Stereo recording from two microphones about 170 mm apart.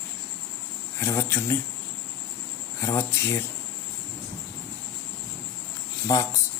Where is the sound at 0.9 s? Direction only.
15° left (ahead or behind).